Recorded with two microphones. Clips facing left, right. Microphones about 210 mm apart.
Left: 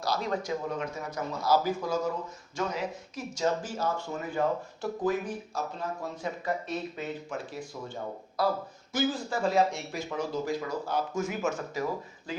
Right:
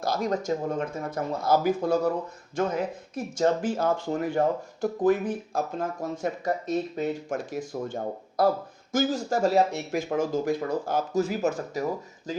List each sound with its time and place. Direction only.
0.0 s speech: 45° right (ahead or behind)
3.9 s speech: 85° right
4.4 s speech: 50° right (ahead or behind)
11.2 s speech: 35° right (ahead or behind)